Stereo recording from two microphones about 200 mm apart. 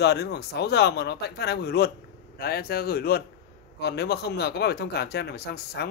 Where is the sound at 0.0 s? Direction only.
55° left (ahead or behind).